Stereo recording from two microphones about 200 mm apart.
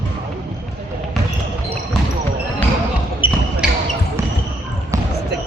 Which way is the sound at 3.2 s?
25° left (ahead or behind).